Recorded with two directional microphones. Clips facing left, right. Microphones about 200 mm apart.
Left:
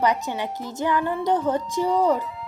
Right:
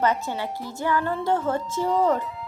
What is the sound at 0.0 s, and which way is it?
Speech, 15° left (ahead or behind).